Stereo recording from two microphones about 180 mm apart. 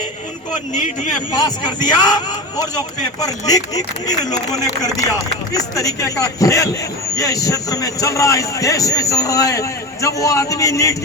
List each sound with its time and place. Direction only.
0.7 s speech: 45° left (ahead or behind)
1.3 s a man's voice: 20° left (ahead or behind)
5.1 s a man's voice: 20° left (ahead or behind)